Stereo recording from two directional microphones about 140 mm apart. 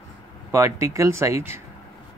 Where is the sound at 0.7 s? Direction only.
20° right (ahead or behind).